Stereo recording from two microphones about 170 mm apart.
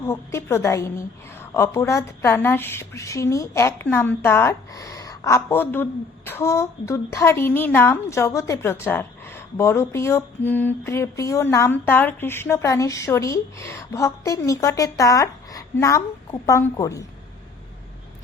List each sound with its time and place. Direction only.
0.0 s a woman's voice: 15° left (ahead or behind)